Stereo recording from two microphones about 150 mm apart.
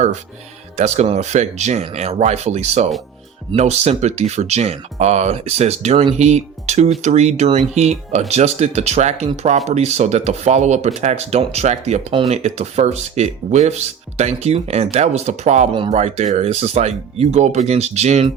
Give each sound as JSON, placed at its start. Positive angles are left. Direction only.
{"t": 0.8, "sound": "speech", "side_deg": -45}